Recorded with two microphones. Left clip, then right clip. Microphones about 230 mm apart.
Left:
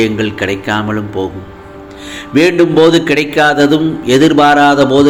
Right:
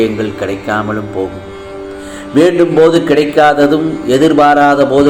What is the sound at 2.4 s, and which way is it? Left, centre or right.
Mantra, left.